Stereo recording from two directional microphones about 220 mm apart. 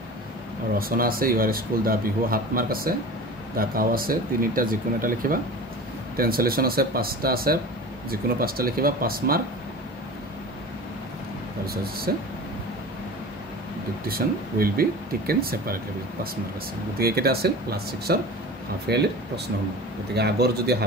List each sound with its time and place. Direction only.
0.7 s speech: 40° right (ahead or behind)
11.6 s speech: 45° right (ahead or behind)
14.0 s speech: 40° right (ahead or behind)
17.0 s speech: 45° right (ahead or behind)